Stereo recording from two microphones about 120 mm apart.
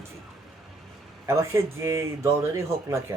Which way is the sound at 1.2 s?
25° right (ahead or behind).